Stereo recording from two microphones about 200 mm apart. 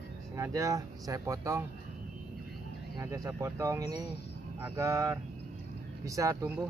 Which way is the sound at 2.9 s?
15° right (ahead or behind).